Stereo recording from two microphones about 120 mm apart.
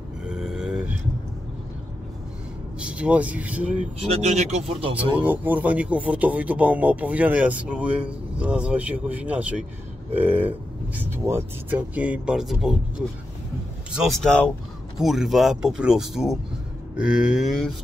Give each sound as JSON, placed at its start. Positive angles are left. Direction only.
{"t": 0.3, "sound": "a sound", "side_deg": -5}
{"t": 2.8, "sound": "speech", "side_deg": -10}
{"t": 3.8, "sound": "speech", "side_deg": -70}
{"t": 5.1, "sound": "speech", "side_deg": -15}